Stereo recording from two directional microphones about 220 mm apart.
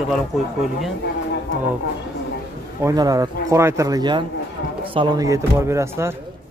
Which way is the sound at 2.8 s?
15° right (ahead or behind).